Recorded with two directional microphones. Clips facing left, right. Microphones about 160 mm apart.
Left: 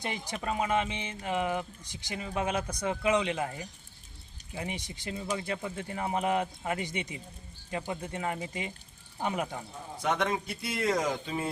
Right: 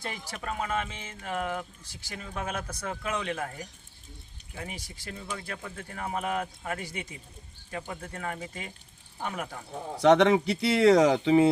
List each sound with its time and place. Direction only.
0.0 s speech: 15° left (ahead or behind)
4.5 s speech: 20° left (ahead or behind)
10.0 s speech: 80° right